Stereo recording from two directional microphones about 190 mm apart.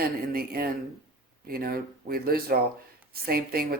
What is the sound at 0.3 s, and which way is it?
A woman's voice, 55° right (ahead or behind).